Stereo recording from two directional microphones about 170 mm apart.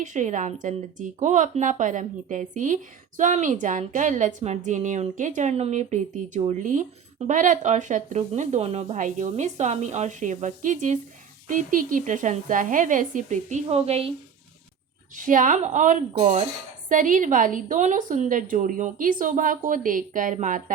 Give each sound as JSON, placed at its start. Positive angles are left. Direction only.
{"t": 0.0, "sound": "a woman's voice", "side_deg": -45}
{"t": 15.1, "sound": "a woman's voice", "side_deg": -50}